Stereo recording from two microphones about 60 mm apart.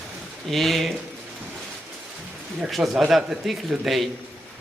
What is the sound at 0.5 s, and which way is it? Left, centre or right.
Speech, centre.